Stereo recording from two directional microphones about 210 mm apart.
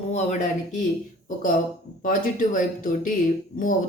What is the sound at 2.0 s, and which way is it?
Speech, 40° left (ahead or behind).